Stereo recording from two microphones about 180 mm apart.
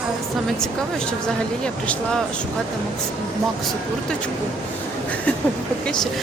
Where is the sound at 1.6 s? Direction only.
5° left (ahead or behind).